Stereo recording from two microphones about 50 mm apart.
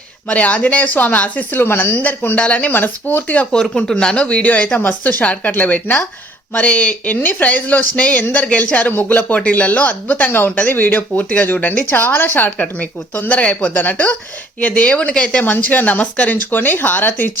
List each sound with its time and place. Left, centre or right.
0.3 s a woman's voice: left
1.5 s a woman's voice: left
2.0 s speech: left
2.6 s a woman's voice: left
3.5 s a woman's voice: centre
15.4 s a woman's voice: left